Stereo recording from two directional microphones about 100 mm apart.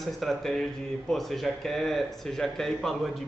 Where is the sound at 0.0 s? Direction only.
Centre (ahead or behind).